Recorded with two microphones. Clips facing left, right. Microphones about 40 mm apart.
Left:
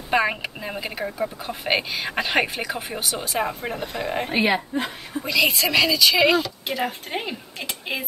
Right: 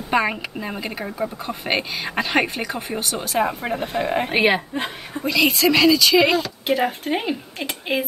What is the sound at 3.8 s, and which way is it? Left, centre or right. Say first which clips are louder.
Speech: right 5 dB; right.